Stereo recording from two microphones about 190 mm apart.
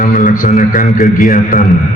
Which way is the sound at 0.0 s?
45° left (ahead or behind).